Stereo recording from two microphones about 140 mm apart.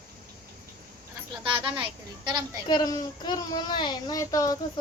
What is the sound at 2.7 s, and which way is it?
Speech, 30° left (ahead or behind).